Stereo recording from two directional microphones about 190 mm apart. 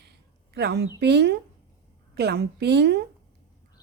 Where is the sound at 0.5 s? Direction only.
60° right (ahead or behind).